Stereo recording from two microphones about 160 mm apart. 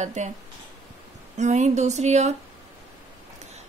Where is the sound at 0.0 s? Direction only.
50° right (ahead or behind).